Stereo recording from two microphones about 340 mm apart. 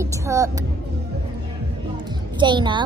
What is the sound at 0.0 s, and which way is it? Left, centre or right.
Speech, centre.